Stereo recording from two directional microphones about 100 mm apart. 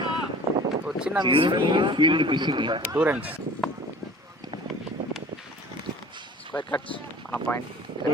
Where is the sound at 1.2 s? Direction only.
55° right (ahead or behind).